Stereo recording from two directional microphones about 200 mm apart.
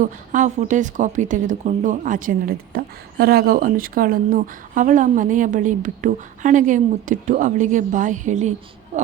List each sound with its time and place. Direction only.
0.0 s speech: 40° right (ahead or behind)